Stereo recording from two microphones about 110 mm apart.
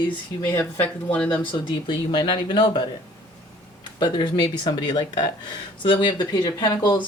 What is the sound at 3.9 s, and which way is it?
Speech, 45° left (ahead or behind).